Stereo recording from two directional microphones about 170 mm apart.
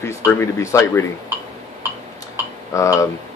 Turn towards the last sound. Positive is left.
turn(degrees=20)  # may be behind; listen again after turning